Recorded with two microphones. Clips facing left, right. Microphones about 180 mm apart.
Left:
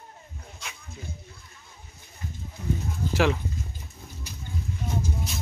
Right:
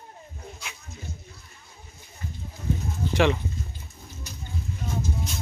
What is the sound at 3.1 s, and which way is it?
Speech, centre (ahead or behind).